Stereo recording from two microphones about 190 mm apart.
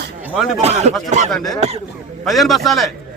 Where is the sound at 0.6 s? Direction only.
35° right (ahead or behind).